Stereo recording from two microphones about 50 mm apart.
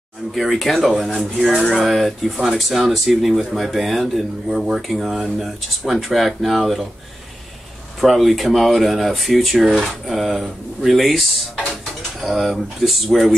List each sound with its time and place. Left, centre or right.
0.3 s speech: centre
8.0 s speech: centre